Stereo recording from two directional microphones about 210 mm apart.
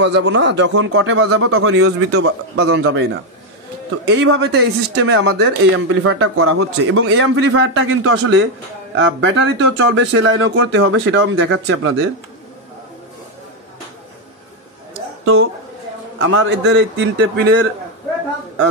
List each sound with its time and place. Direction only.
0.0 s speech: 55° right (ahead or behind)
2.2 s speech: 90° right; by 12.1 s 70° right (ahead or behind)
16.2 s speech: 70° right (ahead or behind)